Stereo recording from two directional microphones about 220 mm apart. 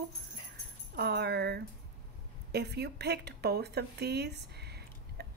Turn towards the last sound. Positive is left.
turn(degrees=-45)  # may be behind; listen again after turning